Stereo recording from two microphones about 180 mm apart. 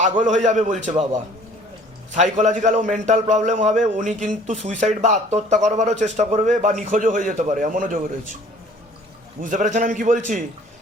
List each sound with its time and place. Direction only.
0.2 s a man's voice: 45° right (ahead or behind)
9.4 s a man's voice: 45° right (ahead or behind)